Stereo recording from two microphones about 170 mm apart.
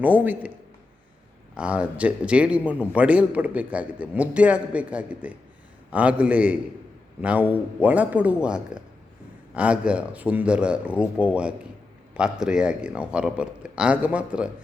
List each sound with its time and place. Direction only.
0.0 s a man's voice: 10° right (ahead or behind)
1.5 s a man's voice: 5° right (ahead or behind)